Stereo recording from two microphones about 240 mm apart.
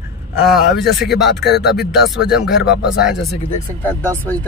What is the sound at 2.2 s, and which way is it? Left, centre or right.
Speech, left.